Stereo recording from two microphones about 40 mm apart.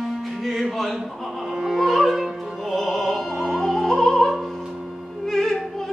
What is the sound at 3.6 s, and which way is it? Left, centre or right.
Opera, centre.